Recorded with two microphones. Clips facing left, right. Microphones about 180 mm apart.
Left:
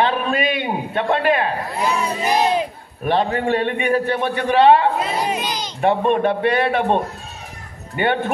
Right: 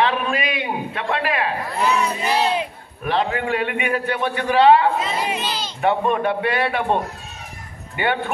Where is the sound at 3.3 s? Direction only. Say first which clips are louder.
Left 3 dB; 35° left (ahead or behind).